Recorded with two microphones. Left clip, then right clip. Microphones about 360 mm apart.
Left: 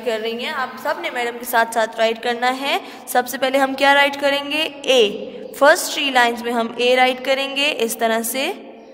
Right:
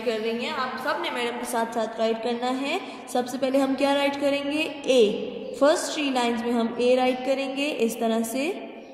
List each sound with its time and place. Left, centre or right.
0.0 s a woman's voice: centre